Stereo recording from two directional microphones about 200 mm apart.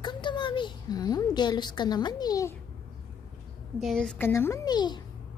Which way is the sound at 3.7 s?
Centre (ahead or behind).